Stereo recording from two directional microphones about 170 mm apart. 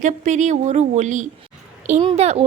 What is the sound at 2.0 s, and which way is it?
Speech, 35° right (ahead or behind).